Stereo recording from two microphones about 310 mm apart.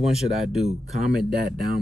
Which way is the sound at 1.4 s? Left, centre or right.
Right.